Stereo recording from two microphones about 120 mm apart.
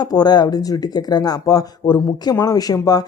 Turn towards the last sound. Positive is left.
turn(degrees=30)  # may be behind; listen again after turning